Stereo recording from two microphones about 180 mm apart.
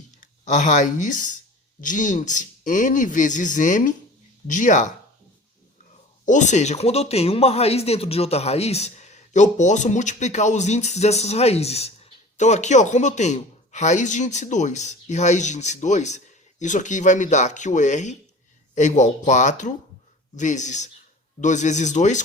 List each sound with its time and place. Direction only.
0.2 s a man's voice: 45° left (ahead or behind)
6.2 s speech: 40° left (ahead or behind)